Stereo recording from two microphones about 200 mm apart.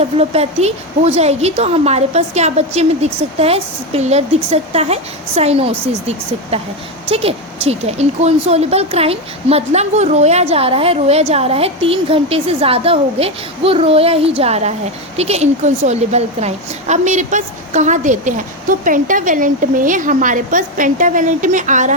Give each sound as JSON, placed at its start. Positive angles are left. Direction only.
{"t": 0.0, "sound": "speech", "side_deg": -30}